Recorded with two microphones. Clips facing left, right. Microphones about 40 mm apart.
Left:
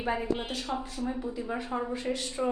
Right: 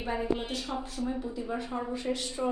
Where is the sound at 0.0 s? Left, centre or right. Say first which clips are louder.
Left 1 dB; centre.